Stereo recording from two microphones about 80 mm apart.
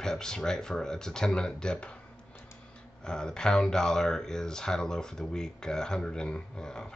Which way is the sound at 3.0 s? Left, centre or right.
Centre.